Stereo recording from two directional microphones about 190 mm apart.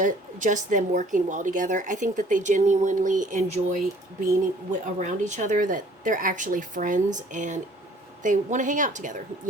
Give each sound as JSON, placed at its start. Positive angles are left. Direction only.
{"t": 0.0, "sound": "speech", "side_deg": -40}
{"t": 4.9, "sound": "speech", "side_deg": -40}